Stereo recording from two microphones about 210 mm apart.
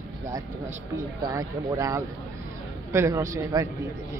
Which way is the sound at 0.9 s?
15° right (ahead or behind).